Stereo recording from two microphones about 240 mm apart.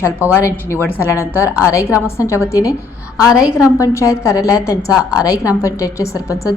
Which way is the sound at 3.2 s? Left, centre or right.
Centre.